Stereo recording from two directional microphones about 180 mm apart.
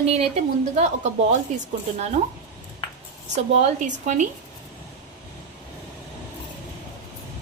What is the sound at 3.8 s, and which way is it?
Speech, 45° right (ahead or behind).